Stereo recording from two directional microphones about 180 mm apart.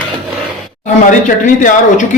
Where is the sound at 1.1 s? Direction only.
45° left (ahead or behind).